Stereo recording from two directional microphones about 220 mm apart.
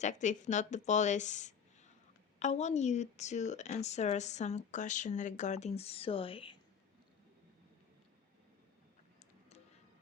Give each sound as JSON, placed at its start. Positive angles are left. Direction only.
{"t": 0.0, "sound": "a woman's voice", "side_deg": 35}